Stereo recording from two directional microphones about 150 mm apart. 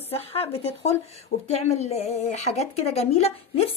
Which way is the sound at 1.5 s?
45° left (ahead or behind).